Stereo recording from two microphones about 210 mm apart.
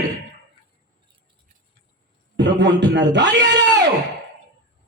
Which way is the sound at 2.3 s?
55° right (ahead or behind).